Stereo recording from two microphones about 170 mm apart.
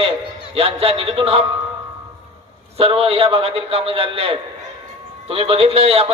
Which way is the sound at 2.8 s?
35° right (ahead or behind).